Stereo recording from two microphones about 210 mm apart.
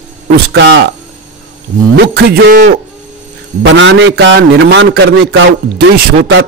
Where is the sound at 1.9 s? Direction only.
50° right (ahead or behind).